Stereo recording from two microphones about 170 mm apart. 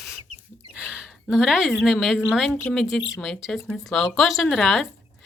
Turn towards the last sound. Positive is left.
turn(degrees=0)  # may be behind; listen again after turning